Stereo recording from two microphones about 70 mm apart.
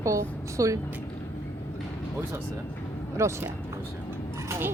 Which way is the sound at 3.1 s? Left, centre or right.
Right.